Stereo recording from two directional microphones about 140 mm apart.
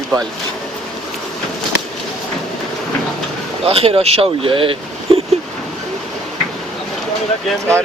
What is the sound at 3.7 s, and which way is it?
Speech, 45° right (ahead or behind).